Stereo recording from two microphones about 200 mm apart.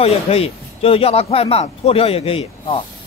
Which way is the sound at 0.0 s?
30° left (ahead or behind).